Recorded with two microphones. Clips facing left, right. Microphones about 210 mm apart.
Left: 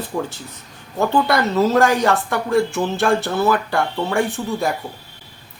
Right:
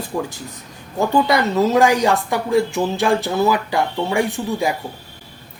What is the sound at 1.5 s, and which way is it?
Speech, 15° right (ahead or behind).